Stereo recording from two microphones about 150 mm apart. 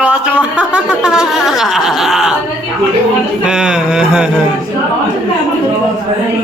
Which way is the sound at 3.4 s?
5° right (ahead or behind).